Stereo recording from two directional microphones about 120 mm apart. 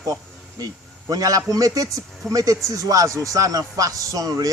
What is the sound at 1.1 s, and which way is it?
A man's voice, 30° right (ahead or behind).